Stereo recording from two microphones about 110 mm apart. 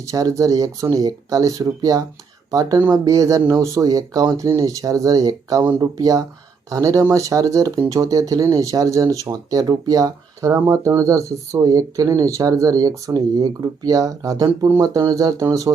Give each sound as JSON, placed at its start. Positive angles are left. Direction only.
{"t": 0.0, "sound": "speech", "side_deg": -30}